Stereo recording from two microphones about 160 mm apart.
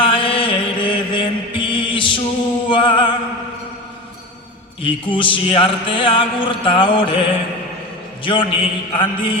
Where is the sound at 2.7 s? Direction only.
30° left (ahead or behind).